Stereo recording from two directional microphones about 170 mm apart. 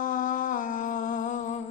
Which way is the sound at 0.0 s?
50° left (ahead or behind).